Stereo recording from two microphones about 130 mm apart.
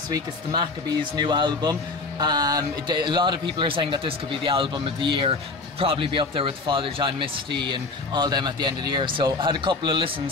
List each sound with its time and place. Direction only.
0.1 s speech: 30° right (ahead or behind)